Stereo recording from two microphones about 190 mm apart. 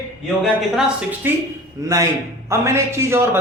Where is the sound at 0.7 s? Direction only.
10° right (ahead or behind).